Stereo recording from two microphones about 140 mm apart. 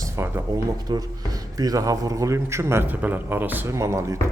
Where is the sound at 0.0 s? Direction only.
20° right (ahead or behind).